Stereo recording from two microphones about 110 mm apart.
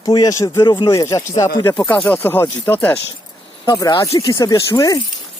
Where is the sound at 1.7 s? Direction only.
10° left (ahead or behind).